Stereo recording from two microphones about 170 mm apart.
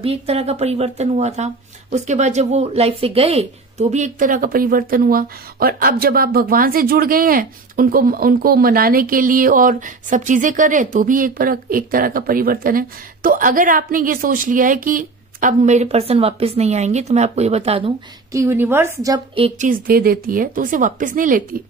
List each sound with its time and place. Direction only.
0.0 s speech: 35° right (ahead or behind)
18.3 s a woman's voice: 15° right (ahead or behind)
19.6 s a woman's voice: 55° right (ahead or behind)